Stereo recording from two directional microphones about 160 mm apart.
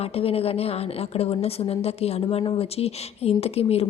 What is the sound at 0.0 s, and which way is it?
Speech, 40° left (ahead or behind).